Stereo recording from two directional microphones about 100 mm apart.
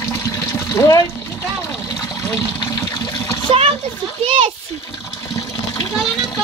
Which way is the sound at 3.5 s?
65° right (ahead or behind).